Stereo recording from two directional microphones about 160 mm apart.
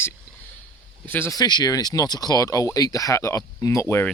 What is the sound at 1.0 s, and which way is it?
Speech, 15° left (ahead or behind).